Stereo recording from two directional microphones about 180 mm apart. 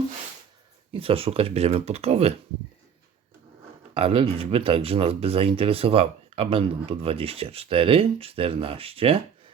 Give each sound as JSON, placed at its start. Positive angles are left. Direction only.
{"t": 0.9, "sound": "speech", "side_deg": -30}
{"t": 3.9, "sound": "speech", "side_deg": -30}